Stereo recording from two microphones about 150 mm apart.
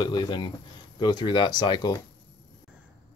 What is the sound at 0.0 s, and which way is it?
Speech, 30° left (ahead or behind).